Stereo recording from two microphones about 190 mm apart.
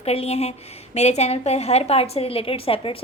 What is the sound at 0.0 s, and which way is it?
A woman's voice, 30° left (ahead or behind).